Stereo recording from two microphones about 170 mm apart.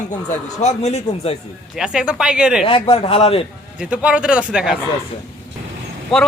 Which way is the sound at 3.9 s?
5° right (ahead or behind).